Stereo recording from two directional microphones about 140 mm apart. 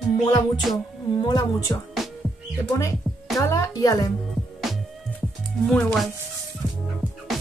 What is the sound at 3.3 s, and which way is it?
Speech, 25° left (ahead or behind).